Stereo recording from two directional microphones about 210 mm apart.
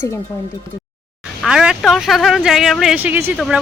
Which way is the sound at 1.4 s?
5° right (ahead or behind).